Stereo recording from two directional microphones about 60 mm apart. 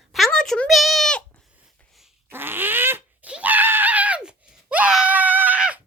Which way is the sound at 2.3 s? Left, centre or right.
Right.